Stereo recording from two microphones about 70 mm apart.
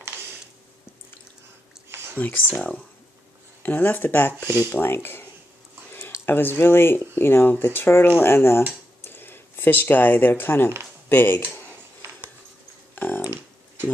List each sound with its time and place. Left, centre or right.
2.1 s speech: left
3.6 s speech: left
5.9 s a sound: left
6.2 s speech: left
12.9 s typing: left